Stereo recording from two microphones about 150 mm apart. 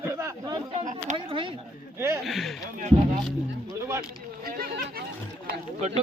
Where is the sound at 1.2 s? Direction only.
35° right (ahead or behind).